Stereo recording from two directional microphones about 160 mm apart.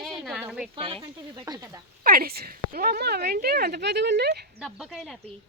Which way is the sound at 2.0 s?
65° right (ahead or behind).